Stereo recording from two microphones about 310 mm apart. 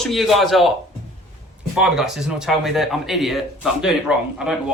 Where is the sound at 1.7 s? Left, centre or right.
Centre.